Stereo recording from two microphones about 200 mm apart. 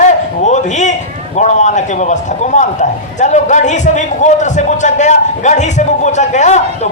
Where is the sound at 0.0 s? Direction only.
35° left (ahead or behind).